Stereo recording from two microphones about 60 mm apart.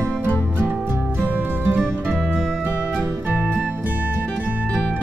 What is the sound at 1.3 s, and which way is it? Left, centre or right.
Music, right.